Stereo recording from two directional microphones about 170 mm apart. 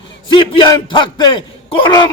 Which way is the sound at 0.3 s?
25° left (ahead or behind).